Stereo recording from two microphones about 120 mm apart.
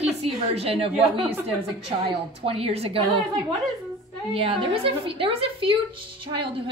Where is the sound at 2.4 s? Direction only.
55° right (ahead or behind).